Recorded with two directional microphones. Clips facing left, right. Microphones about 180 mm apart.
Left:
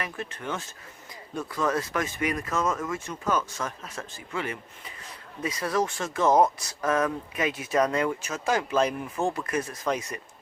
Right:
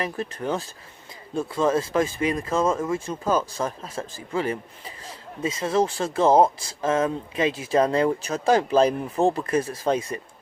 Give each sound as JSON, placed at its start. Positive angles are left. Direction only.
{"t": 0.0, "sound": "speech", "side_deg": -35}